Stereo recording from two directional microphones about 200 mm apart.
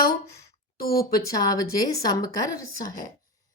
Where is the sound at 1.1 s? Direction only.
20° left (ahead or behind).